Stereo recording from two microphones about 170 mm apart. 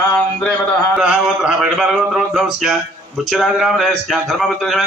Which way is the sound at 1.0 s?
5° right (ahead or behind).